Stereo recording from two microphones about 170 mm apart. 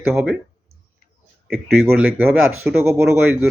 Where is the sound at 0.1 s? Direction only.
5° right (ahead or behind).